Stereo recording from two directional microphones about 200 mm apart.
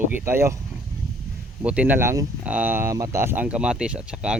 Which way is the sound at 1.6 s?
5° right (ahead or behind).